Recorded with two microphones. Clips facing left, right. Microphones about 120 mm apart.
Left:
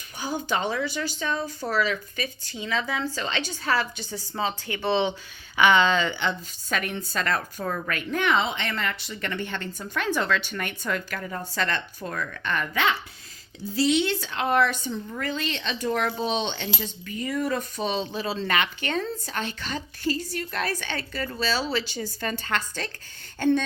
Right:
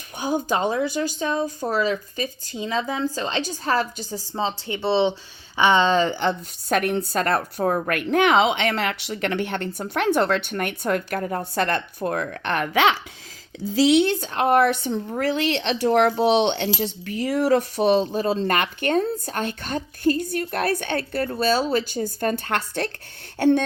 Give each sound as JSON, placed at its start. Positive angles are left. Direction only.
{"t": 0.2, "sound": "a woman's voice", "side_deg": -45}
{"t": 4.4, "sound": "a woman's voice", "side_deg": -25}
{"t": 7.9, "sound": "a woman's voice", "side_deg": -60}
{"t": 12.4, "sound": "a woman's voice", "side_deg": -60}
{"t": 14.0, "sound": "a woman's voice", "side_deg": -50}
{"t": 18.0, "sound": "a woman's voice", "side_deg": -45}